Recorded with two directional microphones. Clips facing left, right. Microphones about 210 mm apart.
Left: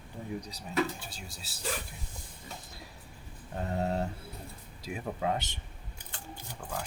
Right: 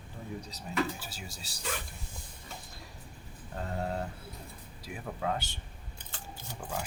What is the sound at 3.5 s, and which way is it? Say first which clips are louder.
Speech: left 3 dB; 20° left (ahead or behind).